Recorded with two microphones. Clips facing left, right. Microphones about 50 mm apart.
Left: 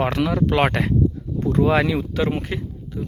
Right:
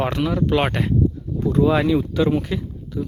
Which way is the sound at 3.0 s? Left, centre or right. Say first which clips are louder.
Right 3 dB; left.